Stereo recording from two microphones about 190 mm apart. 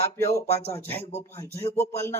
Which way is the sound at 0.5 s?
35° left (ahead or behind).